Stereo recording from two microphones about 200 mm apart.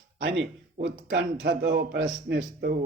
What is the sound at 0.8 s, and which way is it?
A man's voice, 55° right (ahead or behind).